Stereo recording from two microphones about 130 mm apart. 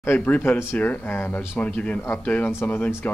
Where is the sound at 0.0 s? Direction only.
15° left (ahead or behind).